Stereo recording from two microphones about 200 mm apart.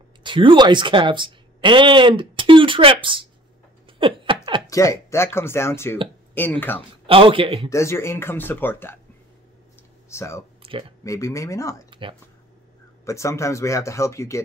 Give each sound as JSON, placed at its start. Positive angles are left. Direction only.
{"t": 0.2, "sound": "speech", "side_deg": -25}
{"t": 4.0, "sound": "a sound", "side_deg": -25}
{"t": 4.6, "sound": "speech", "side_deg": 15}
{"t": 7.1, "sound": "a man's voice", "side_deg": -25}
{"t": 7.7, "sound": "speech", "side_deg": 15}
{"t": 10.0, "sound": "speech", "side_deg": 15}
{"t": 10.6, "sound": "a sound", "side_deg": -30}
{"t": 11.1, "sound": "speech", "side_deg": 15}
{"t": 11.9, "sound": "a sound", "side_deg": -25}
{"t": 13.0, "sound": "speech", "side_deg": 15}